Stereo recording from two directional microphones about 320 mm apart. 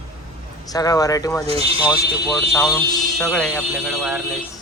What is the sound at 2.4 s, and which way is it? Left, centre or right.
A man's voice, centre.